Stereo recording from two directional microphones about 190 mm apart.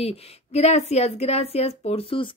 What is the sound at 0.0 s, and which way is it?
Speech, 35° left (ahead or behind).